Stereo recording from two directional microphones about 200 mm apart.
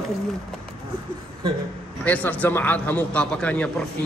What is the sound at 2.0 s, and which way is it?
Speech, 10° left (ahead or behind).